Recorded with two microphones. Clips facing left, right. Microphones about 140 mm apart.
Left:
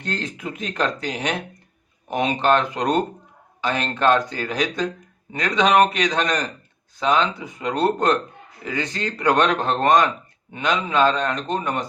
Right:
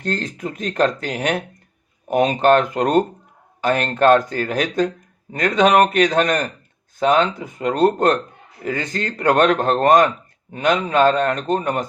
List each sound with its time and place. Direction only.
0.0 s speech: 40° right (ahead or behind)